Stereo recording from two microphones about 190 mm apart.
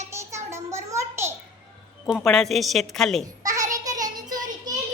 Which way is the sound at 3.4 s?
15° right (ahead or behind).